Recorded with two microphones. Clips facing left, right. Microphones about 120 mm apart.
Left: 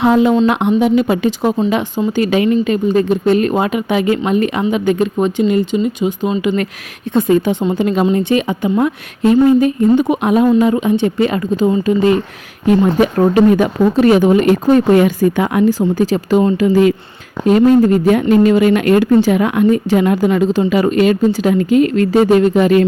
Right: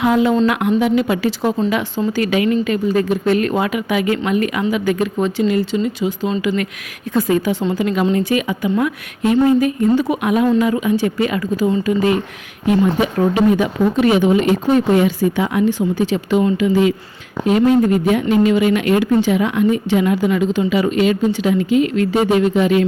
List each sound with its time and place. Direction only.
0.0 s speech: 25° left (ahead or behind)
10.2 s a woman's voice: 30° left (ahead or behind)
12.6 s speech: 45° left (ahead or behind)
15.8 s a woman's voice: 40° left (ahead or behind)